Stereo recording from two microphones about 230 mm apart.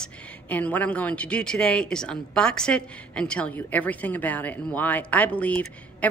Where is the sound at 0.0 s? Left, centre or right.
Centre.